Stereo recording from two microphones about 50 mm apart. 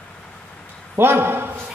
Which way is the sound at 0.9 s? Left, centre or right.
Right.